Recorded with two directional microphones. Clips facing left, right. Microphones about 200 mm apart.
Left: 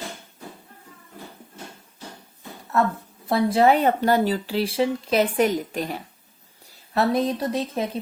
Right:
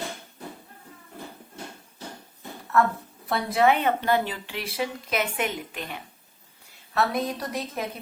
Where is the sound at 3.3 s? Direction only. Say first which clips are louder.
Left 4 dB; 25° left (ahead or behind).